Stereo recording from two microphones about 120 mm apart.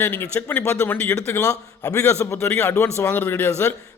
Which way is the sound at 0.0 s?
15° left (ahead or behind).